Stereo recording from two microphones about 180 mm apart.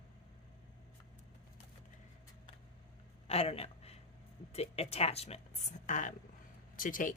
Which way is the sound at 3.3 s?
35° left (ahead or behind).